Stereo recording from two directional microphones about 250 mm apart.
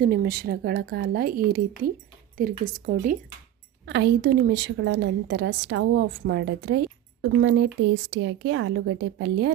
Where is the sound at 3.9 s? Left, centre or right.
Right.